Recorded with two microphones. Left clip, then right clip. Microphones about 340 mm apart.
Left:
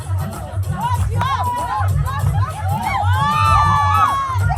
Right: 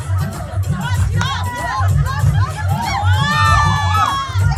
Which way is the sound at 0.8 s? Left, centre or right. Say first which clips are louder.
Left 3 dB; centre.